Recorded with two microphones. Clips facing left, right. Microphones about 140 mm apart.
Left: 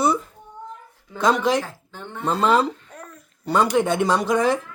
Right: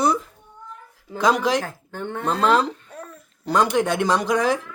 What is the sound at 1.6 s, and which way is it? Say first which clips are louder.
Speech: right 3 dB; 55° right (ahead or behind).